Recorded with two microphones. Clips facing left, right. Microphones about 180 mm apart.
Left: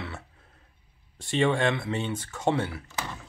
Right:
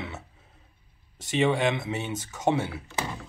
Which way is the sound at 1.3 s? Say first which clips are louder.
Even; 10° right (ahead or behind).